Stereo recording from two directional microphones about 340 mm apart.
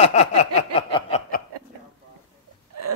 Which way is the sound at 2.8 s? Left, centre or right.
Right.